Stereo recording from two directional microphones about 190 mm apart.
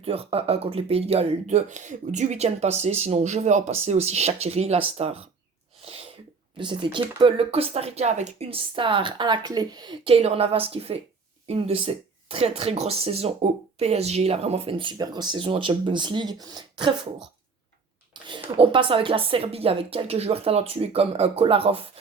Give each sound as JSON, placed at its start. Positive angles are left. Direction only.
{"t": 0.0, "sound": "speech", "side_deg": -30}
{"t": 6.6, "sound": "speech", "side_deg": -25}
{"t": 18.1, "sound": "speech", "side_deg": -25}